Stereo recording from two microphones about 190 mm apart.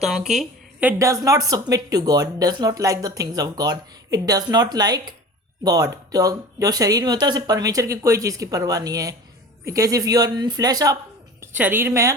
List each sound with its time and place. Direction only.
0.0 s speech: centre (ahead or behind); by 10.9 s 20° right (ahead or behind)
11.3 s a woman's voice: 10° right (ahead or behind)